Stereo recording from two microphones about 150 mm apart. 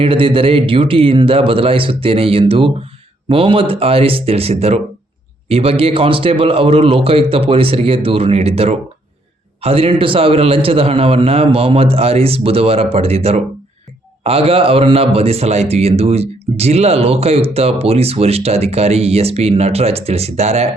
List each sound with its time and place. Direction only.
0.0 s a man's voice: 35° right (ahead or behind)